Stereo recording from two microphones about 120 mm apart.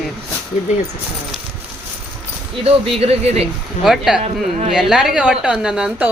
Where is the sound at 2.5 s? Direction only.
55° right (ahead or behind).